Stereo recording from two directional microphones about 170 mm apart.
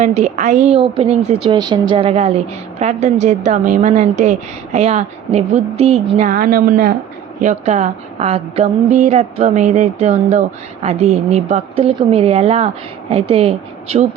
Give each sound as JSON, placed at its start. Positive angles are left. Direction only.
{"t": 0.0, "sound": "a woman's voice", "side_deg": -40}
{"t": 7.4, "sound": "a woman's voice", "side_deg": -45}